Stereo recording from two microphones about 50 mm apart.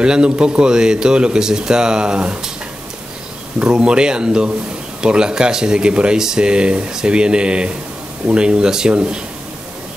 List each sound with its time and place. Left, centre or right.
0.0 s speech: centre
3.5 s speech: centre